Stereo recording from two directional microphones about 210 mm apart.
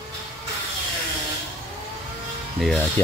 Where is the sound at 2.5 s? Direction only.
Centre (ahead or behind).